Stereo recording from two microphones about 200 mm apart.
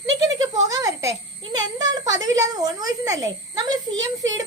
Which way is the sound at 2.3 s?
20° right (ahead or behind).